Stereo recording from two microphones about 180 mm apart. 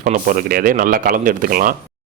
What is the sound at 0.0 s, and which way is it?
Speech, 50° right (ahead or behind).